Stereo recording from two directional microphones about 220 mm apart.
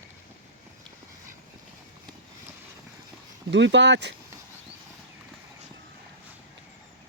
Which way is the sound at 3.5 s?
55° right (ahead or behind).